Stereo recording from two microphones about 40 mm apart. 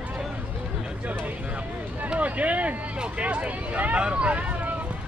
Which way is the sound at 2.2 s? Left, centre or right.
Right.